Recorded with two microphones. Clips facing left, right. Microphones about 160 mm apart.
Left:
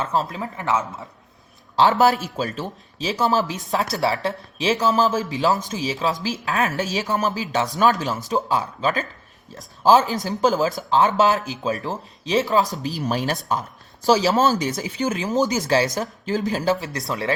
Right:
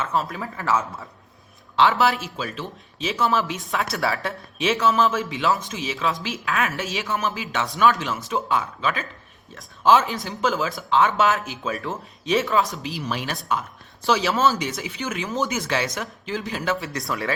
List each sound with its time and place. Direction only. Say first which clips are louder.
0.0 s speech: left 2 dB; 30° left (ahead or behind)
1.7 s speech: left 3 dB; 40° left (ahead or behind)
12.8 s speech: left 5 dB; 40° left (ahead or behind)
17.1 s speech: left 3 dB; 25° left (ahead or behind)